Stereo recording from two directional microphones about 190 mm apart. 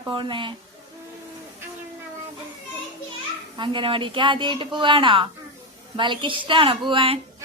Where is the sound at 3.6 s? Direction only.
25° right (ahead or behind).